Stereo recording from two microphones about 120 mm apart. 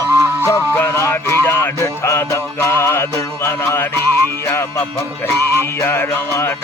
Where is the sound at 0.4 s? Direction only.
20° left (ahead or behind).